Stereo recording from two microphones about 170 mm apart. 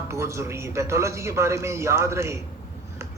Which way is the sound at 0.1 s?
15° right (ahead or behind).